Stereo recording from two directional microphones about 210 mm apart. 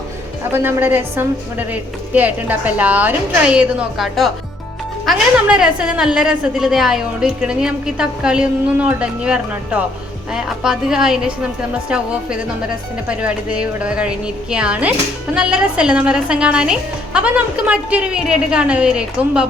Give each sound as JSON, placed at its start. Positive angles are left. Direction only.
{"t": 0.5, "sound": "a woman's voice", "side_deg": -10}
{"t": 13.1, "sound": "a woman's voice", "side_deg": -5}